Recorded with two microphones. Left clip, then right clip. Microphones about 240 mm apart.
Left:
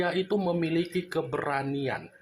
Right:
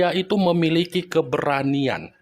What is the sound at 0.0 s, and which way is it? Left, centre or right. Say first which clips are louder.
Speech: right 8 dB; right.